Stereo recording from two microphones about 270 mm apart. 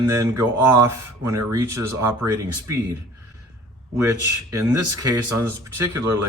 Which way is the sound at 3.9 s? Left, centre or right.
Centre.